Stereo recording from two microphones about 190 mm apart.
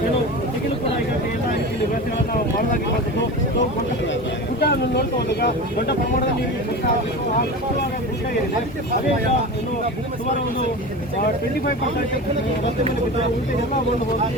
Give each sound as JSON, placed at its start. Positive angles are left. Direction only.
{"t": 4.6, "sound": "speech", "side_deg": 60}